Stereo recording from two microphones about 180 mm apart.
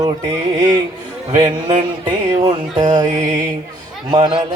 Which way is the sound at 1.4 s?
25° right (ahead or behind).